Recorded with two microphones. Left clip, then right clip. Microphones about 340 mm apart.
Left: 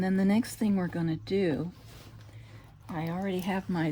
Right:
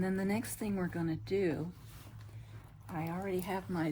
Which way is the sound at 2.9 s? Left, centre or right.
Left.